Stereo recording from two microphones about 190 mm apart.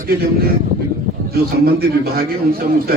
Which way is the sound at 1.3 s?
55° right (ahead or behind).